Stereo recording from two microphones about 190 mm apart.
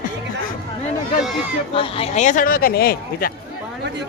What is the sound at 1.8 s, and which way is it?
A man's voice, 30° left (ahead or behind).